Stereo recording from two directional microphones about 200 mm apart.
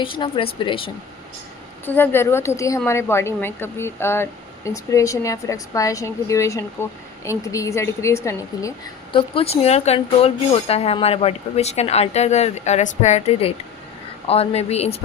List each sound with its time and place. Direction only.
0.0 s speech: 25° left (ahead or behind)
1.8 s a woman's voice: 10° left (ahead or behind)
9.1 s a woman's voice: 25° left (ahead or behind)